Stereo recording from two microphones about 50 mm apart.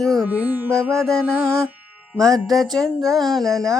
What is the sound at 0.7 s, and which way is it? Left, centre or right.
Music, right.